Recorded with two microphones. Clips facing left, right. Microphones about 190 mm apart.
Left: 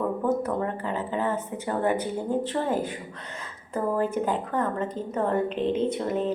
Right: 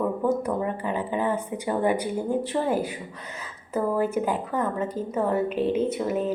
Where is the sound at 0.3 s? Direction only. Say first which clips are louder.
Even; 15° right (ahead or behind).